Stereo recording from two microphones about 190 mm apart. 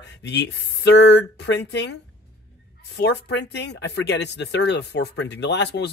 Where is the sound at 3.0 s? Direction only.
65° left (ahead or behind).